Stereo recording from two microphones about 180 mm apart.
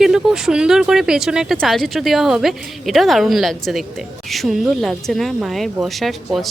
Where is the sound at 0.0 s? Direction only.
5° right (ahead or behind).